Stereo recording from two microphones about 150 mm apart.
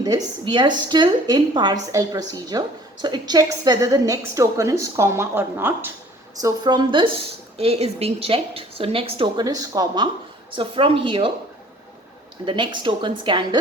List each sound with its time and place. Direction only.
0.0 s a woman's voice: 30° right (ahead or behind)
6.3 s a woman's voice: 25° right (ahead or behind)
7.6 s a woman's voice: 40° right (ahead or behind)
9.4 s a woman's voice: 25° right (ahead or behind)
12.5 s a woman's voice: 35° right (ahead or behind)